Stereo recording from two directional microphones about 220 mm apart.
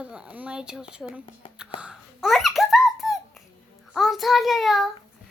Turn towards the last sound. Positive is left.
turn(degrees=0)  # may be behind; listen again after turning